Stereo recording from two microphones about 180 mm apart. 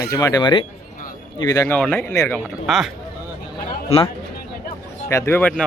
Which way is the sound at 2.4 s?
Centre (ahead or behind).